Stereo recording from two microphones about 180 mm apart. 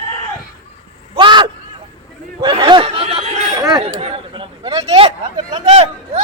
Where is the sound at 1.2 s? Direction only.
25° right (ahead or behind).